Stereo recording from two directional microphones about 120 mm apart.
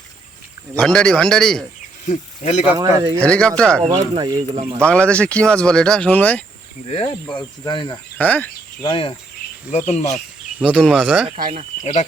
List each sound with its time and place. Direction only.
0.8 s a man's voice: 5° left (ahead or behind)
2.0 s speech: 90° left
2.7 s speech: 25° right (ahead or behind)
3.2 s speech: 10° left (ahead or behind)
3.8 s speech: 40° right (ahead or behind)
4.5 s speech: 75° right (ahead or behind)
4.8 s speech: 10° left (ahead or behind)
6.9 s speech: 40° left (ahead or behind)
8.2 s speech: 15° left (ahead or behind)
8.8 s speech: 45° left (ahead or behind)
9.7 s speech: 65° left (ahead or behind)
10.6 s speech: 10° right (ahead or behind)